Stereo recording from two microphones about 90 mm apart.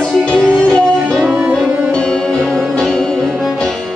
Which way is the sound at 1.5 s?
5° left (ahead or behind).